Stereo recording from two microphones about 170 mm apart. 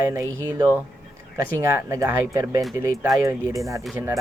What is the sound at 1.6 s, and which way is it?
Speech, 15° right (ahead or behind).